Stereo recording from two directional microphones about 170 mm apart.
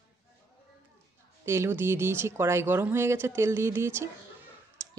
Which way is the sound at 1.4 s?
15° right (ahead or behind).